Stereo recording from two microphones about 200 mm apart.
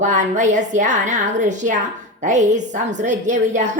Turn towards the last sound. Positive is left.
turn(degrees=-35)  # may be behind; listen again after turning